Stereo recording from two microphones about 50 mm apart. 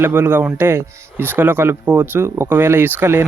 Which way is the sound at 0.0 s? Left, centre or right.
Right.